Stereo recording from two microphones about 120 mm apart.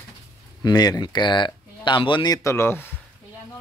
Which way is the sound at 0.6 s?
35° left (ahead or behind).